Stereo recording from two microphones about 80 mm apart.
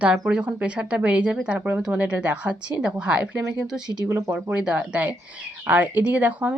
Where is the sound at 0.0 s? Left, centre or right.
Centre.